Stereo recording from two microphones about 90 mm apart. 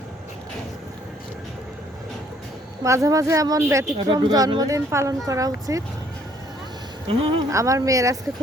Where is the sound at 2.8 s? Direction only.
35° right (ahead or behind).